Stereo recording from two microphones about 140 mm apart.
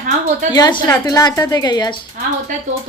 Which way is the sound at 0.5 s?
30° left (ahead or behind).